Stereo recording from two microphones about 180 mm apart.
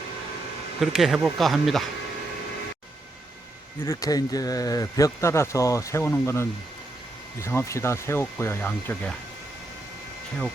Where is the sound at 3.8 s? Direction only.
20° left (ahead or behind).